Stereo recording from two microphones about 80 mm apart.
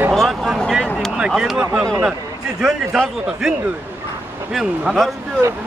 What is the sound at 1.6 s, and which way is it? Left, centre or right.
Speech, right.